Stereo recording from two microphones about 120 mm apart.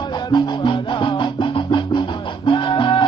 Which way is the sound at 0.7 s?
45° left (ahead or behind).